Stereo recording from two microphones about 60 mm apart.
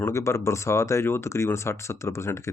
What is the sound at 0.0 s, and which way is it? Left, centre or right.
Speech, left.